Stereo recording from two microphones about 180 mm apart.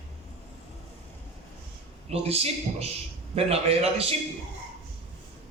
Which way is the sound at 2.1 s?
35° right (ahead or behind).